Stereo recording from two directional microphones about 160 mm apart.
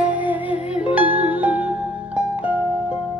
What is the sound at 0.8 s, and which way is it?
Music, 10° right (ahead or behind).